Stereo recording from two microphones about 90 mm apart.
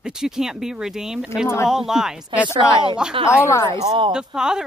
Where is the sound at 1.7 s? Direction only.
5° right (ahead or behind).